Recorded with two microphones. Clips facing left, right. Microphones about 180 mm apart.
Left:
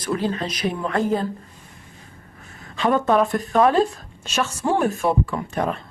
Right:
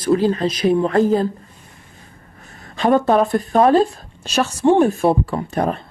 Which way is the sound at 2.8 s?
35° right (ahead or behind).